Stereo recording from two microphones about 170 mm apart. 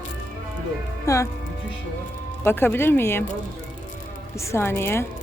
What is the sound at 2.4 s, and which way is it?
Speech, 10° left (ahead or behind).